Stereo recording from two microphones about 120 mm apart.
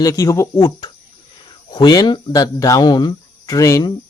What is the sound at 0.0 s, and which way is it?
Speech, 30° left (ahead or behind).